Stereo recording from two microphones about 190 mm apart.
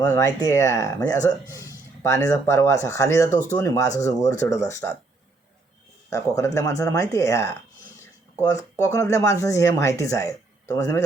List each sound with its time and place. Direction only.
0.0 s speech: 15° left (ahead or behind)
6.1 s speech: 15° left (ahead or behind)
8.5 s speech: 15° left (ahead or behind)